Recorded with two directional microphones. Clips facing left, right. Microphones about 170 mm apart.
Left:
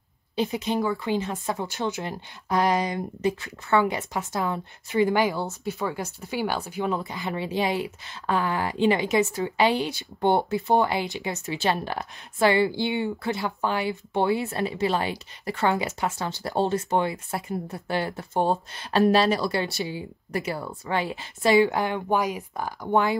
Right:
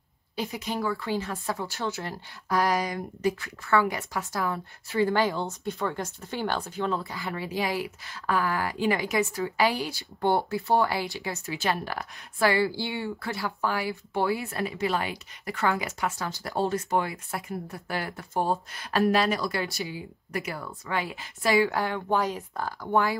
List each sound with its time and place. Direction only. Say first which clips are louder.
0.4 s speech: left 5 dB; 25° left (ahead or behind)